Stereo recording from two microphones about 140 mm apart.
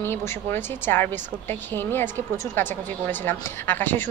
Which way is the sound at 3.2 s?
15° left (ahead or behind).